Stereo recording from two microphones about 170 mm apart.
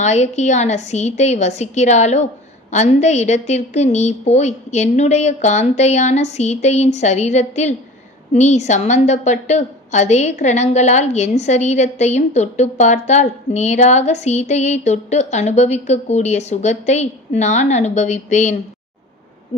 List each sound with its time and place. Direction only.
0.0 s a woman's voice: 40° left (ahead or behind)